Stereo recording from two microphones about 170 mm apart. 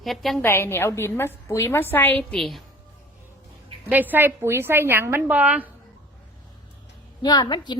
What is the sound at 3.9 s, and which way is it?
A woman's voice, 10° right (ahead or behind).